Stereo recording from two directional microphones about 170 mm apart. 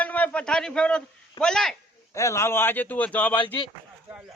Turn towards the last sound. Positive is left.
turn(degrees=30)  # may be behind; listen again after turning